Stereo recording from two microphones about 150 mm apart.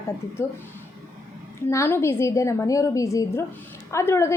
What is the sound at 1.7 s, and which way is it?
A woman's voice, 15° left (ahead or behind).